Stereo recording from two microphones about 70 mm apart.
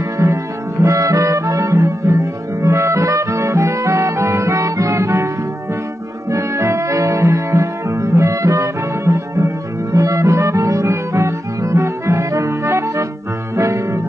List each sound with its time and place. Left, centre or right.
0.2 s music: right
6.3 s music: right